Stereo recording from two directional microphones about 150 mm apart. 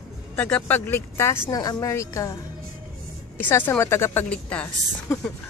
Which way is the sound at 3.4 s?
15° left (ahead or behind).